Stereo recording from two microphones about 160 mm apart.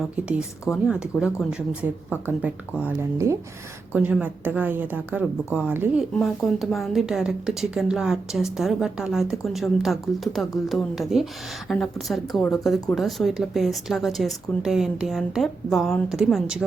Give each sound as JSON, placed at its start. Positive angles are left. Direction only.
{"t": 0.0, "sound": "a woman's voice", "side_deg": -5}